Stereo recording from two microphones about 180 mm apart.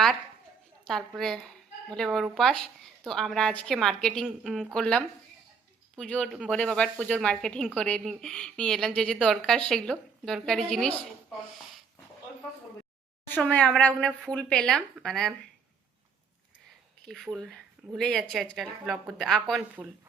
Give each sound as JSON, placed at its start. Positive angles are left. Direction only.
{"t": 0.9, "sound": "a woman's voice", "side_deg": 0}
{"t": 13.2, "sound": "a woman's voice", "side_deg": 10}
{"t": 17.1, "sound": "a woman's voice", "side_deg": 0}